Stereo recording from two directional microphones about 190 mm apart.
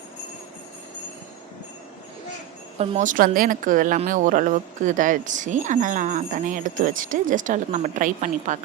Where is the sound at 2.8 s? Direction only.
35° right (ahead or behind).